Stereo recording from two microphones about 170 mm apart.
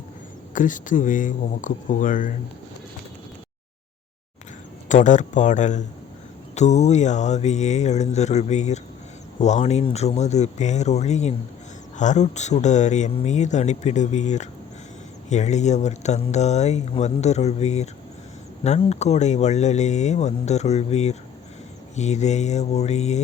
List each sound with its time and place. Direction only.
0.5 s speech: 50° left (ahead or behind)
4.9 s speech: 45° left (ahead or behind)